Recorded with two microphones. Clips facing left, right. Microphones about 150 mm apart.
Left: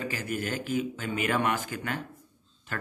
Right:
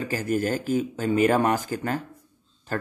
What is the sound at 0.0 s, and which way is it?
Speech, 40° right (ahead or behind).